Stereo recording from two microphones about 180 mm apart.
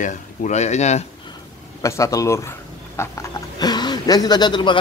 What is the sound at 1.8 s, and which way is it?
A man's voice, 15° left (ahead or behind).